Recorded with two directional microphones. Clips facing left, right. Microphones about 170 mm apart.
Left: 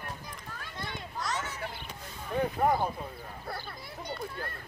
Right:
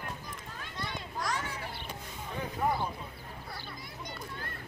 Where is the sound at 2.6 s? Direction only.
50° left (ahead or behind).